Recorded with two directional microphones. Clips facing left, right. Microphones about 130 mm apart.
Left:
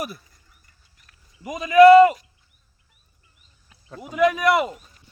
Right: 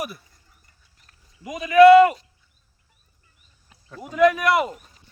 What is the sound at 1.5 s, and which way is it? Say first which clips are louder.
Speech: left 1 dB; 30° left (ahead or behind).